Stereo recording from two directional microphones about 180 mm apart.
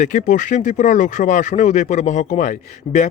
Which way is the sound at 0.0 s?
45° left (ahead or behind).